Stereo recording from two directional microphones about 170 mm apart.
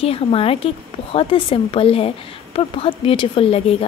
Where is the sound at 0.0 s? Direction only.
35° left (ahead or behind).